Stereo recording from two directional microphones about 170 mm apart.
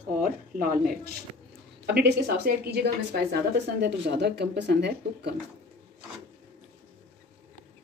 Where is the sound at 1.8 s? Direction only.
70° right (ahead or behind).